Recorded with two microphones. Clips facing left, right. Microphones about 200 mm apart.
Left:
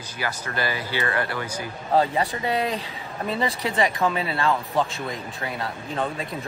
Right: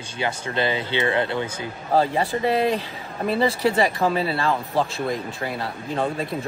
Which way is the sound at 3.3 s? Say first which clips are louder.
Right 6 dB; 30° right (ahead or behind).